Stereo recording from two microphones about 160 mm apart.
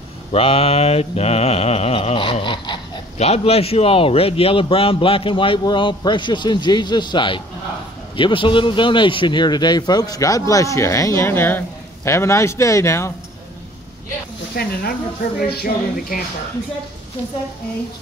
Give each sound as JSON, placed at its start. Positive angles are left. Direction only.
{"t": 0.3, "sound": "a man's voice", "side_deg": 35}
{"t": 14.5, "sound": "music", "side_deg": 75}